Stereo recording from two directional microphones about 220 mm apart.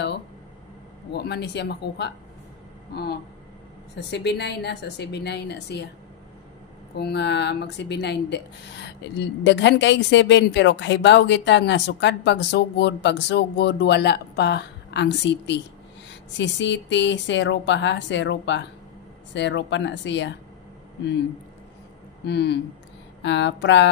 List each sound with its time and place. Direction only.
1.1 s a woman's voice: 50° left (ahead or behind)
7.0 s a woman's voice: 50° left (ahead or behind)
22.2 s a woman's voice: 50° left (ahead or behind)